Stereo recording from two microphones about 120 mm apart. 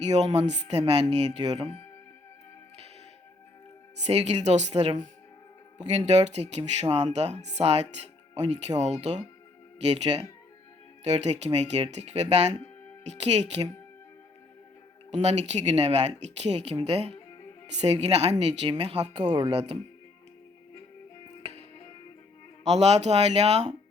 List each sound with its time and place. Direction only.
0.0 s speech: 70° right (ahead or behind)
4.0 s speech: 60° right (ahead or behind)
15.1 s speech: 65° right (ahead or behind)
22.6 s speech: 60° right (ahead or behind)